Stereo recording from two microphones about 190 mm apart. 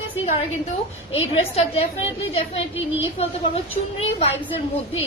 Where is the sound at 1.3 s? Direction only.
30° left (ahead or behind).